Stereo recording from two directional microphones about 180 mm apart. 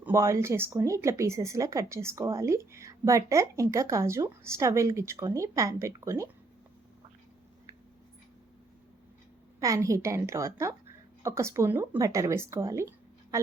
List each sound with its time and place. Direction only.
0.0 s speech: 15° right (ahead or behind)
9.6 s speech: 20° right (ahead or behind)